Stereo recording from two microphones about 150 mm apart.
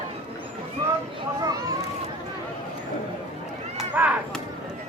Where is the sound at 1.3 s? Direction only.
25° right (ahead or behind).